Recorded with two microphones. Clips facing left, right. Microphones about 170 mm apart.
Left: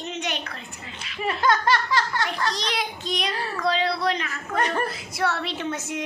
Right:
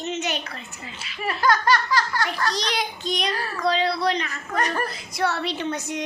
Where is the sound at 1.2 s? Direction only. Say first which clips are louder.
Even; 25° left (ahead or behind).